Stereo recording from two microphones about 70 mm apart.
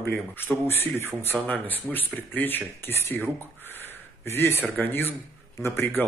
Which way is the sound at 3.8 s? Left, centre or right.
Left.